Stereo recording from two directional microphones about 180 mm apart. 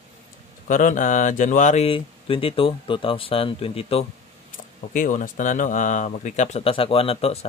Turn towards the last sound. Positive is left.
turn(degrees=30)  # may be behind; listen again after turning